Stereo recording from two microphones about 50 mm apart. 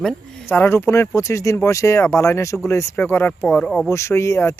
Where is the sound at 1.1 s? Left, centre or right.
Left.